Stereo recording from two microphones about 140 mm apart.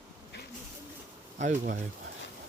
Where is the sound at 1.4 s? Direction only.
60° right (ahead or behind).